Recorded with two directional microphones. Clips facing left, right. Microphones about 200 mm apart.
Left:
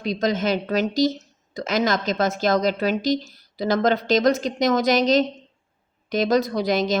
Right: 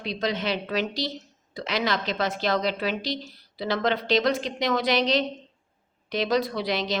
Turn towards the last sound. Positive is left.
turn(degrees=45)  # may be behind; listen again after turning